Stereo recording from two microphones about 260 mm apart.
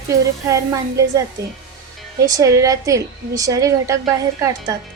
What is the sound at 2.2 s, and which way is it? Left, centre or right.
A woman's voice, centre.